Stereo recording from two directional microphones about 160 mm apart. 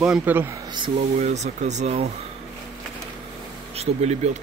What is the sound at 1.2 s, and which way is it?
Speech, 45° right (ahead or behind).